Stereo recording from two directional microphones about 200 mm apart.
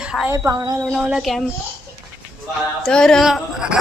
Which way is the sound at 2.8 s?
5° left (ahead or behind).